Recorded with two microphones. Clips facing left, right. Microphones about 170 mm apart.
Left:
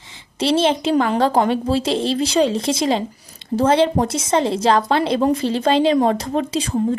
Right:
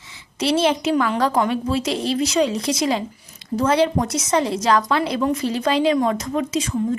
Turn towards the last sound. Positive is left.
turn(degrees=35)  # may be behind; listen again after turning